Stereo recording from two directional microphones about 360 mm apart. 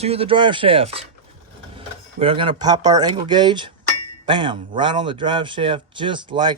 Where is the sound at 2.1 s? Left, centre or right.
Centre.